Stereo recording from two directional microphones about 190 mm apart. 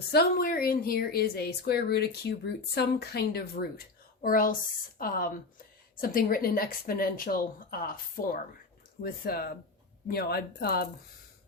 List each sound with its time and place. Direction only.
0.1 s a woman's voice: 55° left (ahead or behind)